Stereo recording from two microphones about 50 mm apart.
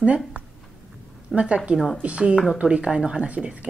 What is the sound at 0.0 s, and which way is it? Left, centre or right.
Speech, right.